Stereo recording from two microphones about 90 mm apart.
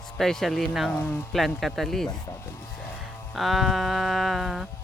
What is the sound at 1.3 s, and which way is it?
Speech, 5° left (ahead or behind).